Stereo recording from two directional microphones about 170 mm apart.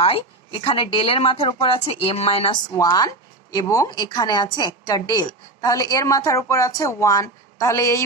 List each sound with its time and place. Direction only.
0.0 s speech: 35° left (ahead or behind)
2.7 s a woman's voice: 20° left (ahead or behind)